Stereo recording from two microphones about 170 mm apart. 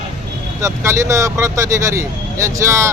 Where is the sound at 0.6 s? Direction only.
15° right (ahead or behind).